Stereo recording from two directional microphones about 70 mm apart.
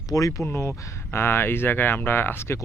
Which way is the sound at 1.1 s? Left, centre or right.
Left.